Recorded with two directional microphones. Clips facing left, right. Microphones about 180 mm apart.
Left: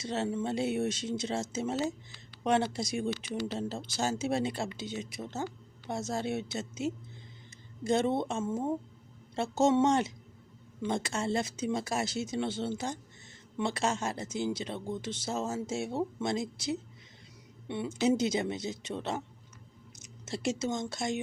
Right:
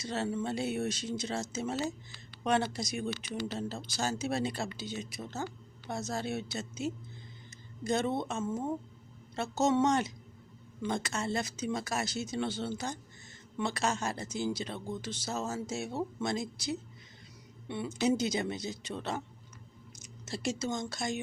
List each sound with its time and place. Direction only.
0.0 s speech: 25° left (ahead or behind)